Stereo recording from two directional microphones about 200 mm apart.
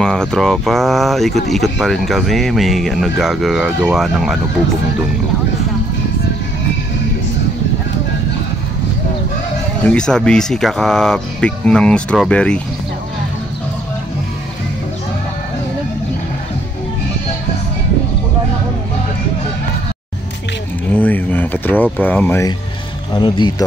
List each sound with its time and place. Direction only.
0.0 s speech: 5° left (ahead or behind)
9.8 s speech: 5° left (ahead or behind)
20.9 s a sound: 10° left (ahead or behind)
21.9 s speech: 10° left (ahead or behind)
23.1 s speech: 20° left (ahead or behind)